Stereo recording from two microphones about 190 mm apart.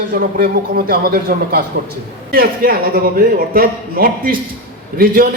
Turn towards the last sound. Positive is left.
turn(degrees=-50)  # may be behind; listen again after turning